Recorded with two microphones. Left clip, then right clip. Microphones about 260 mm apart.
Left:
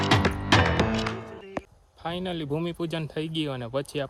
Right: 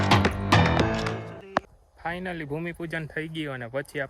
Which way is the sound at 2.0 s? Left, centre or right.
Centre.